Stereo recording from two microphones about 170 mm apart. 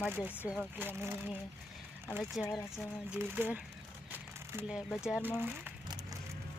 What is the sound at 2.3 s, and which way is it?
Speech, centre (ahead or behind).